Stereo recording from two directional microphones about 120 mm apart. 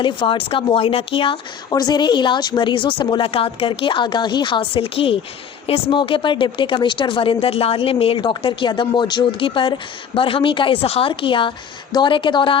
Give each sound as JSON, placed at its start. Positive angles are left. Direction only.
{"t": 0.0, "sound": "speech", "side_deg": 45}
{"t": 1.7, "sound": "a woman's voice", "side_deg": 35}